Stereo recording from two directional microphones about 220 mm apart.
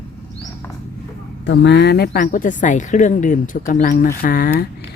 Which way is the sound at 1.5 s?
50° left (ahead or behind).